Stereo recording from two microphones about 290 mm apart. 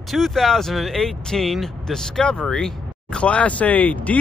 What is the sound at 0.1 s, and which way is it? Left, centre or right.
Speech, centre.